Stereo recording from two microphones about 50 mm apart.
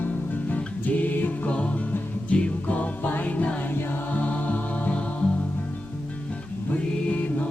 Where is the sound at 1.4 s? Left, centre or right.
Left.